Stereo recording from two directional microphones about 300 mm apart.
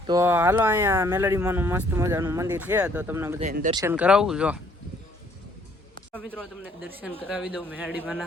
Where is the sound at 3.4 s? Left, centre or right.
Right.